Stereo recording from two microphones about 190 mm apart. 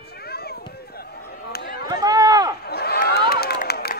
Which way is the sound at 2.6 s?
55° left (ahead or behind).